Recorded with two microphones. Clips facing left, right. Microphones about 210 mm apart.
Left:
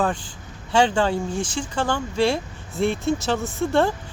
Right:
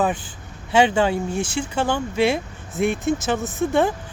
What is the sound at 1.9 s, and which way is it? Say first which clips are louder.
Speech: right 1 dB; 20° right (ahead or behind).